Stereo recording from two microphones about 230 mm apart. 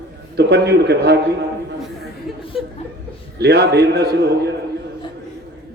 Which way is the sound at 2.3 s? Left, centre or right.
Centre.